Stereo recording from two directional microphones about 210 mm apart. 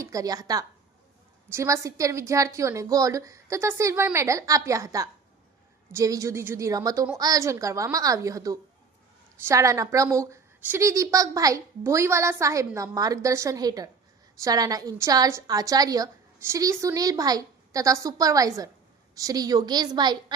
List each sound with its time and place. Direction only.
0.0 s a woman's voice: 15° right (ahead or behind)